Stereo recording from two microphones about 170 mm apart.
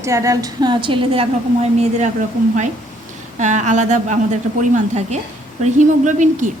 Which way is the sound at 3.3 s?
45° right (ahead or behind).